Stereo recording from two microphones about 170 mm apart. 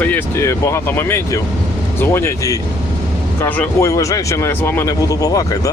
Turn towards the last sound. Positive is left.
turn(degrees=20)  # may be behind; listen again after turning